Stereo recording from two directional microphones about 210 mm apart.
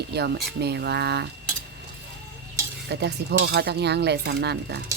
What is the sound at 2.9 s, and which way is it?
Speech, 50° right (ahead or behind).